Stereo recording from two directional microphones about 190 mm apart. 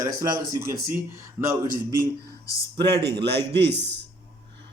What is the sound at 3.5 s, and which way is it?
Speech, 60° right (ahead or behind).